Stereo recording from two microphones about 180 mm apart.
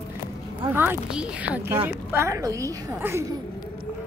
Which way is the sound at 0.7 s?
10° right (ahead or behind).